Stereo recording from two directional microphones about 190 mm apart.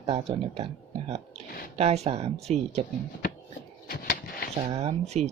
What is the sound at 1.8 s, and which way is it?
Speech, 35° right (ahead or behind).